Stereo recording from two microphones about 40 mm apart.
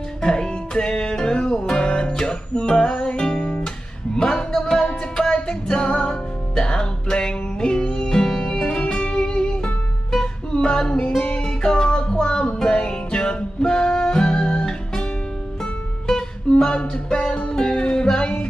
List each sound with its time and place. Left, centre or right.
0.2 s music: left
16.1 s music: centre
16.7 s music: left